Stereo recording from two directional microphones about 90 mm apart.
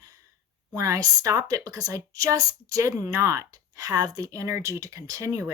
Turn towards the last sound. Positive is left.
turn(degrees=-35)  # may be behind; listen again after turning